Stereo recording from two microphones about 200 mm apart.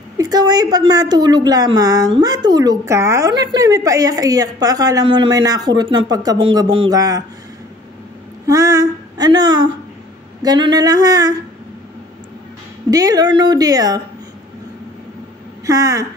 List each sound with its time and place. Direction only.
0.2 s a woman's voice: 20° right (ahead or behind)
8.5 s a woman's voice: 15° right (ahead or behind)
12.9 s a woman's voice: 20° right (ahead or behind)
15.6 s speech: 15° right (ahead or behind)